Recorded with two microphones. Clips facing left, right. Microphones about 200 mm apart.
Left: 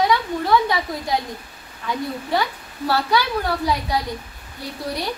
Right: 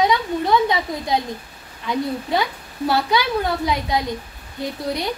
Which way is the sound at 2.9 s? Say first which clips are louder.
Right 1 dB; 20° right (ahead or behind).